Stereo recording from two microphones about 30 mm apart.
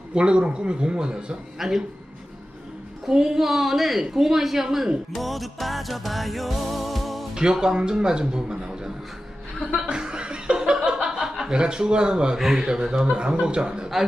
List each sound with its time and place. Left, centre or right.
0.1 s a man's voice: right
1.5 s a woman's voice: centre
3.1 s a woman's voice: centre
5.1 s music: centre
7.6 s a man's voice: right
9.8 s chuckle: right
12.4 s a woman's voice: centre
12.6 s a man's voice: right